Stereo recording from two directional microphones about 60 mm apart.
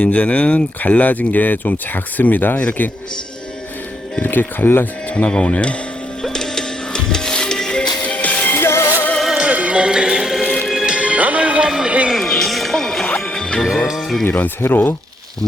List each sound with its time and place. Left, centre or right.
0.0 s speech: left
4.2 s speech: left
5.0 s speech: left
6.2 s music: centre; by 8.5 s left
8.5 s music: left
9.2 s music: centre
9.5 s music: right
12.1 s music: centre
13.8 s speech: centre
14.6 s speech: left